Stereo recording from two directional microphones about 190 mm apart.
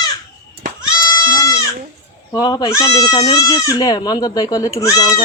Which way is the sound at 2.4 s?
20° left (ahead or behind).